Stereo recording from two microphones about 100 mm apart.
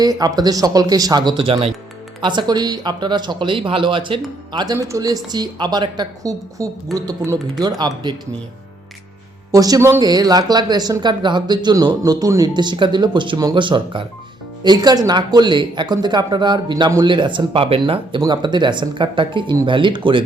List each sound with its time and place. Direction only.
0.0 s speech: 40° right (ahead or behind); by 1.7 s 60° right (ahead or behind)
2.2 s speech: 45° right (ahead or behind)
4.5 s speech: 40° right (ahead or behind)
9.5 s speech: 35° right (ahead or behind); by 18.2 s 55° right (ahead or behind)
18.2 s speech: 45° right (ahead or behind)